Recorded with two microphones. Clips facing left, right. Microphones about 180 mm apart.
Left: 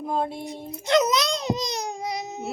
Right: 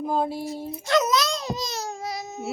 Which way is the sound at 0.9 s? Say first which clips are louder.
Left 1 dB; 20° left (ahead or behind).